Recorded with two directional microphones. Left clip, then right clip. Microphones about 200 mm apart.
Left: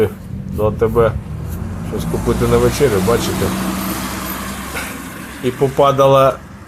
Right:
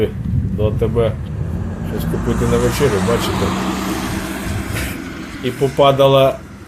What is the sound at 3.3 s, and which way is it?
Vehicle, 65° left (ahead or behind).